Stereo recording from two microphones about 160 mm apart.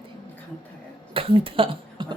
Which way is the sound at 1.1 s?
35° right (ahead or behind).